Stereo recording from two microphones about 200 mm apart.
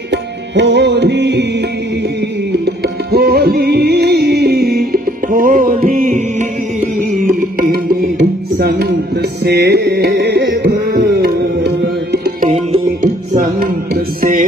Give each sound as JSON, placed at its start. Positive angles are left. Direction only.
{"t": 0.1, "sound": "tabla", "side_deg": -60}
{"t": 2.6, "sound": "music", "side_deg": -50}
{"t": 7.7, "sound": "music", "side_deg": -55}